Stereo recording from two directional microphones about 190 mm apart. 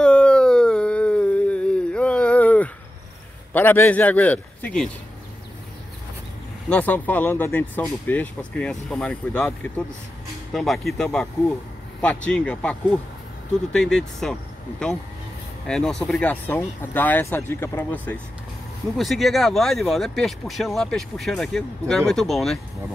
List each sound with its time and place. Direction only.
0.0 s a sound: 5° left (ahead or behind)
3.5 s speech: 10° left (ahead or behind)
6.7 s speech: 10° left (ahead or behind)
15.6 s speech: 5° left (ahead or behind)